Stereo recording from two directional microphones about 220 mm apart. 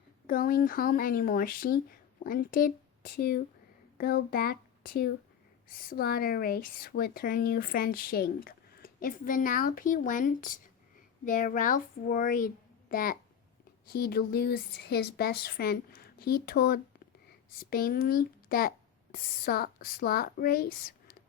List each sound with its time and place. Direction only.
0.3 s a child's voice: 40° left (ahead or behind)